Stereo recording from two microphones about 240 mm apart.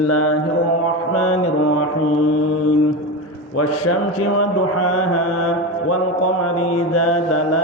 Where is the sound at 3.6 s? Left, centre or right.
Left.